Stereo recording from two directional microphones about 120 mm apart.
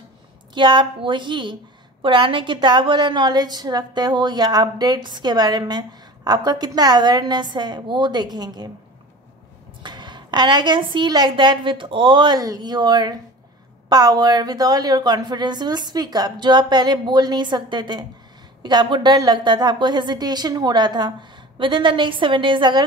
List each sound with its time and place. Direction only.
0.6 s a woman's voice: 40° right (ahead or behind)
9.8 s a woman's voice: 40° right (ahead or behind)
12.4 s a woman's voice: 30° right (ahead or behind)